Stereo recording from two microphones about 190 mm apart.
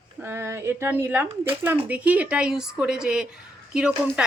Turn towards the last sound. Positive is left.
turn(degrees=-5)  # may be behind; listen again after turning